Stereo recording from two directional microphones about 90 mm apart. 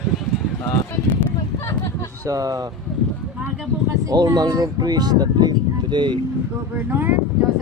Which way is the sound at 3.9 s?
45° right (ahead or behind).